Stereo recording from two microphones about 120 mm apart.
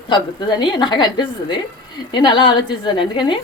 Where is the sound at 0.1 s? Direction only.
40° left (ahead or behind).